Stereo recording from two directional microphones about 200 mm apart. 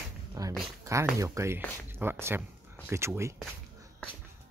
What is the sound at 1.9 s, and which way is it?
Speech, 10° right (ahead or behind).